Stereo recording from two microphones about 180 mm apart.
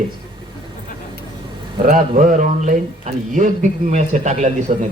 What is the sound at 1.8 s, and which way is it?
Speech, 50° right (ahead or behind).